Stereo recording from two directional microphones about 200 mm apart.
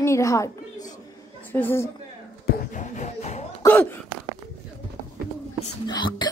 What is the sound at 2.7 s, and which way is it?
Music, 35° left (ahead or behind).